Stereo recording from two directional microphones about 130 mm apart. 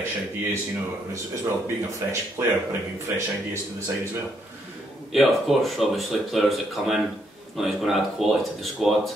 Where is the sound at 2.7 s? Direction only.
20° right (ahead or behind).